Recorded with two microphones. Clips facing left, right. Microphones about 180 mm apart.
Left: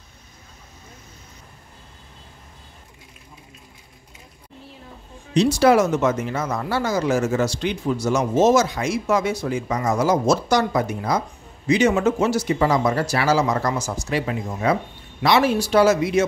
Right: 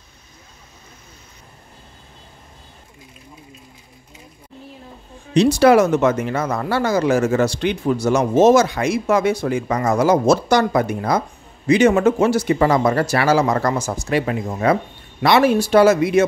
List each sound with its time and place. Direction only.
5.3 s speech: 65° right (ahead or behind)